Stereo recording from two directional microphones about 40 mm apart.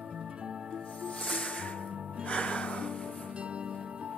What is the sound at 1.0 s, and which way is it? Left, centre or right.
Music, left.